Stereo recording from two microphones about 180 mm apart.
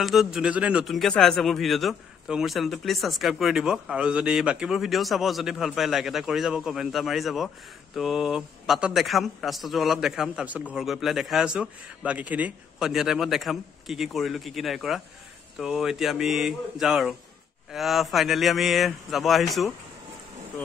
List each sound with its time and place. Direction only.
0.0 s a man's voice: centre (ahead or behind)